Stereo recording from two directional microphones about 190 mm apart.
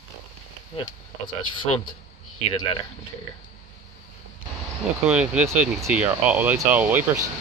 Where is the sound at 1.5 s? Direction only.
25° left (ahead or behind).